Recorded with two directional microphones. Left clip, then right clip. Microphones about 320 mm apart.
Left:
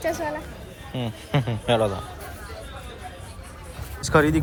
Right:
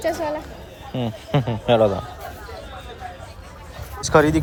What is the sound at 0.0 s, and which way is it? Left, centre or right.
Speech, right.